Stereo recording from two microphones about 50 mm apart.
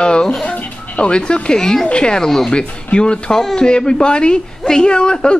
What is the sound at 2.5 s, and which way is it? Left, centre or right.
Speech, centre.